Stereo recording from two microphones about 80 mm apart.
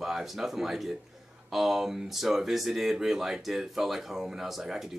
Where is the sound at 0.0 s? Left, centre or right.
Centre.